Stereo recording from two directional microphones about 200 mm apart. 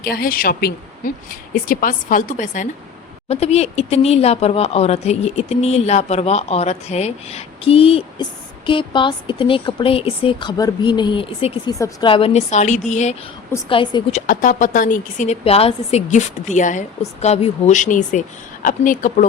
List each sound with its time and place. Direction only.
0.0 s speech: 50° left (ahead or behind); by 11.7 s 30° left (ahead or behind)
11.7 s speech: 20° left (ahead or behind); by 13.1 s 35° left (ahead or behind)
13.7 s a woman's voice: 25° left (ahead or behind)
14.1 s speech: 40° left (ahead or behind)